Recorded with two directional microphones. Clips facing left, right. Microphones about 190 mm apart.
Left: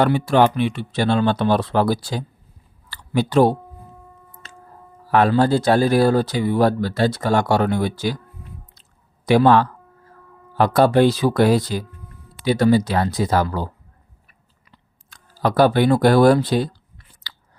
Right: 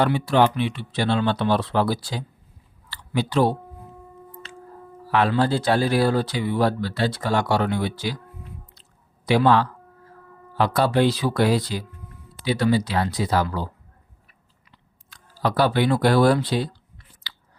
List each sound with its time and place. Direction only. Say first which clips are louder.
0.0 s speech: left 3 dB; 50° left (ahead or behind)
2.9 s a sound: left 5 dB; 45° left (ahead or behind)
4.4 s music: right 3 dB; 40° left (ahead or behind)
5.1 s speech: left 4 dB; 45° left (ahead or behind)
9.2 s speech: left 4 dB; 50° left (ahead or behind)
15.1 s speech: left 4 dB; 50° left (ahead or behind)